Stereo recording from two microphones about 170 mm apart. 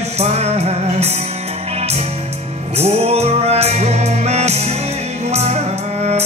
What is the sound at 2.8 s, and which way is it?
Music, 40° right (ahead or behind).